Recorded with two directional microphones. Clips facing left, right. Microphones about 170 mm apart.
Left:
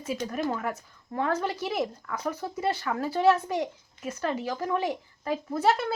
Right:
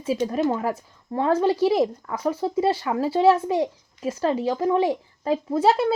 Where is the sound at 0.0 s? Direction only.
30° right (ahead or behind).